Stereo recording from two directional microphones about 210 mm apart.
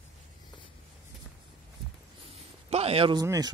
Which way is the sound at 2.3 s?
30° right (ahead or behind).